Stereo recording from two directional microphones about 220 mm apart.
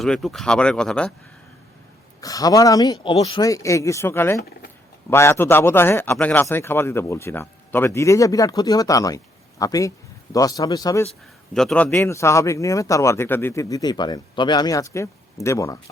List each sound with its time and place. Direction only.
0.0 s speech: centre (ahead or behind)
2.2 s a man's voice: 15° left (ahead or behind)
11.5 s a man's voice: 5° left (ahead or behind)